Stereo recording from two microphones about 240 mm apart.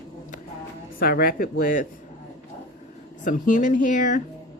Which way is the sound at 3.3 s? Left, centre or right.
Left.